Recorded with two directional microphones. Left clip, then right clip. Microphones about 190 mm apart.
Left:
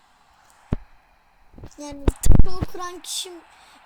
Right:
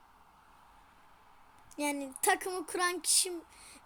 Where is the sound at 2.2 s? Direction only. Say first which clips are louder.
Left 1 dB; centre (ahead or behind).